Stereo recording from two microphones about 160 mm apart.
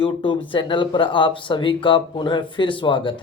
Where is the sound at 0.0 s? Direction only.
30° left (ahead or behind).